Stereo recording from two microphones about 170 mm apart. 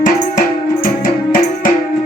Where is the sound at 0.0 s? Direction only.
55° left (ahead or behind).